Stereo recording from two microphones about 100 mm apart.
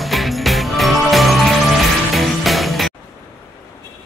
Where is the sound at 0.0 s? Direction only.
Centre (ahead or behind).